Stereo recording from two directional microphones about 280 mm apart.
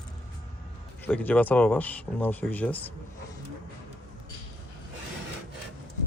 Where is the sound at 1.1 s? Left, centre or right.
Centre.